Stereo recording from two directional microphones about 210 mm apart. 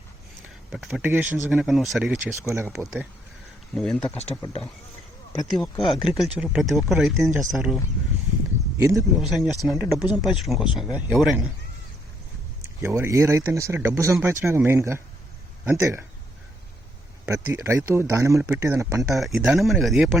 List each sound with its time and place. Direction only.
0.7 s speech: centre (ahead or behind)
3.8 s speech: 5° left (ahead or behind)
4.4 s speech: 25° left (ahead or behind)
5.4 s speech: centre (ahead or behind)
8.8 s speech: 15° right (ahead or behind)
9.1 s speech: centre (ahead or behind)
12.8 s speech: 15° right (ahead or behind)
17.2 s speech: 15° right (ahead or behind)
19.1 s speech: centre (ahead or behind)